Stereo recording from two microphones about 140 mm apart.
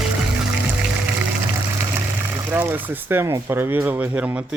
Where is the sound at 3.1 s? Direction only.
15° right (ahead or behind).